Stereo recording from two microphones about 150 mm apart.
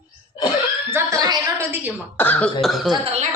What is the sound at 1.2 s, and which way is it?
Speech, 25° right (ahead or behind).